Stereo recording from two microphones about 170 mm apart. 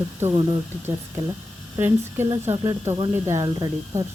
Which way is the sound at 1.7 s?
15° right (ahead or behind).